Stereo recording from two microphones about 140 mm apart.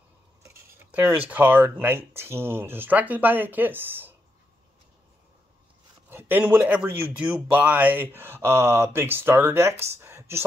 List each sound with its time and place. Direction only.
1.3 s speech: 15° right (ahead or behind)
6.0 s speech: 15° right (ahead or behind)